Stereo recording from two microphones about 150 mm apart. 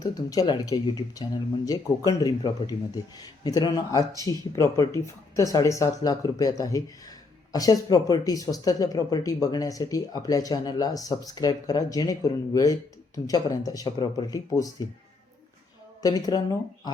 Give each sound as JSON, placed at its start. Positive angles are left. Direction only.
{"t": 0.0, "sound": "speech", "side_deg": 25}
{"t": 16.0, "sound": "speech", "side_deg": 25}